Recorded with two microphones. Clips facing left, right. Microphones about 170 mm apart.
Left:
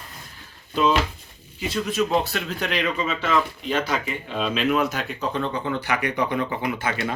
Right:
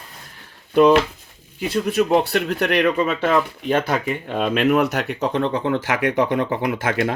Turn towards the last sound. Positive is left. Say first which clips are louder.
# right 5 dB
turn(degrees=-85)